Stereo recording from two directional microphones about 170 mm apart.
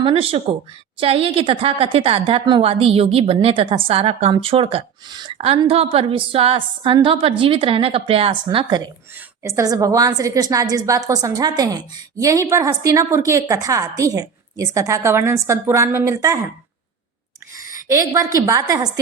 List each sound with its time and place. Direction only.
0.0 s a woman's voice: 35° right (ahead or behind)
17.7 s a woman's voice: 20° right (ahead or behind)